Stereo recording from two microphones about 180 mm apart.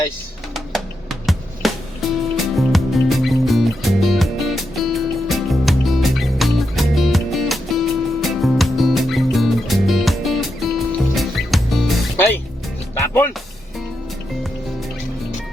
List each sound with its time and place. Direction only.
1.3 s music: centre (ahead or behind)
13.0 s music: 15° left (ahead or behind)